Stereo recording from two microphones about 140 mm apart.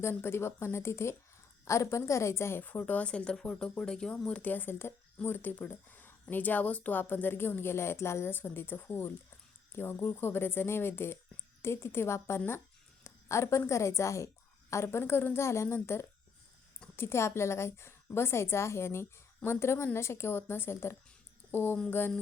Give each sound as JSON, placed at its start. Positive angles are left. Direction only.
{"t": 0.0, "sound": "a woman's voice", "side_deg": 15}